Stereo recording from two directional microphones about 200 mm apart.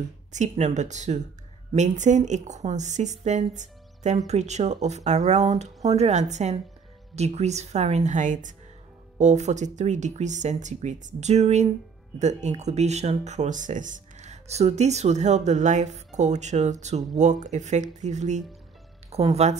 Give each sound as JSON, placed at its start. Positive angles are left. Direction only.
{"t": 0.3, "sound": "speech", "side_deg": -35}